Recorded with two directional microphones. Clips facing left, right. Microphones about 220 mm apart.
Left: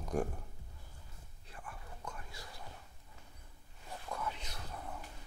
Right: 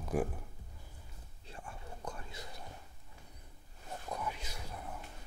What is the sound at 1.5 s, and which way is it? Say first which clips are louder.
Whispering: right 3 dB; 25° right (ahead or behind).